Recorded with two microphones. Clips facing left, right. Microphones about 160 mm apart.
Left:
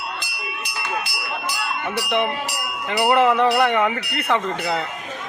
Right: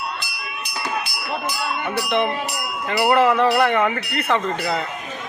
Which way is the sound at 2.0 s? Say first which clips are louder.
Right 1 dB; 10° left (ahead or behind).